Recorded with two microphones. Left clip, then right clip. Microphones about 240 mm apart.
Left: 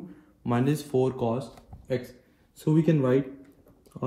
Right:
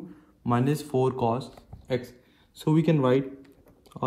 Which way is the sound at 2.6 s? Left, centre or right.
Right.